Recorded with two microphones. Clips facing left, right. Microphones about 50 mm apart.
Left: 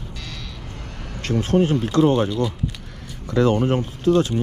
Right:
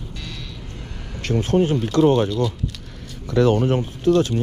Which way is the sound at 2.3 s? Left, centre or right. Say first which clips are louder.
Right 1 dB; centre.